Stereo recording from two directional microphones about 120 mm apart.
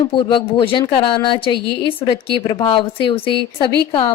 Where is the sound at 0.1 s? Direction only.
40° left (ahead or behind).